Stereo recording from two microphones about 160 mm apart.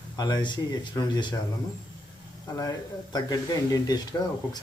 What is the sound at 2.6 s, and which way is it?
Speech, 25° left (ahead or behind).